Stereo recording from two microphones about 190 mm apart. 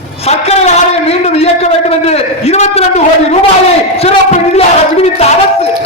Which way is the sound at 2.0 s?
35° left (ahead or behind).